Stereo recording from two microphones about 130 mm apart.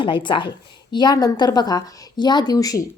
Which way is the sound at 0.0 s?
40° left (ahead or behind).